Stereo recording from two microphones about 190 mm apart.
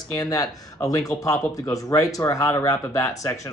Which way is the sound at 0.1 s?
20° left (ahead or behind).